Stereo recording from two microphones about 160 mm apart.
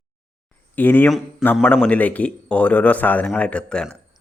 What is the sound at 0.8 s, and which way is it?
A man's voice, 10° left (ahead or behind).